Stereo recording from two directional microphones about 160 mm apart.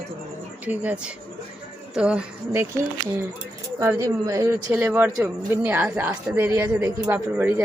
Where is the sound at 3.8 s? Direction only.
20° right (ahead or behind).